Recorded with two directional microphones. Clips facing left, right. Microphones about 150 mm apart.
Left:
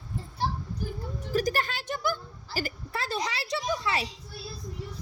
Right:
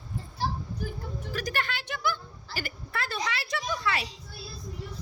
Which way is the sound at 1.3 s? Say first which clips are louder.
Left 5 dB; 40° left (ahead or behind).